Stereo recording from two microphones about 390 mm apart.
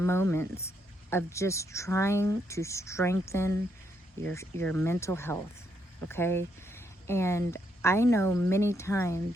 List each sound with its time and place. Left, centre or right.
0.0 s speech: centre